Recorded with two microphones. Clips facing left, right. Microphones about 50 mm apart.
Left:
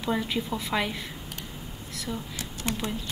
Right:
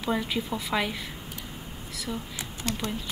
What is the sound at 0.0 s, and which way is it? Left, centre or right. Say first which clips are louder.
Speech: even; centre.